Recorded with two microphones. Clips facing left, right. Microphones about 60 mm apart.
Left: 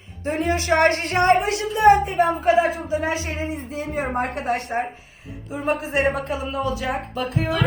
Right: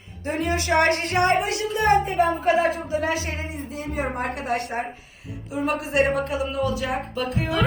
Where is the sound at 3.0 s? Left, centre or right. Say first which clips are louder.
Left 1 dB; left.